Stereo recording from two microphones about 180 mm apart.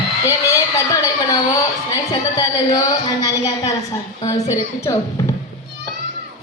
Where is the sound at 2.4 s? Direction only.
20° left (ahead or behind).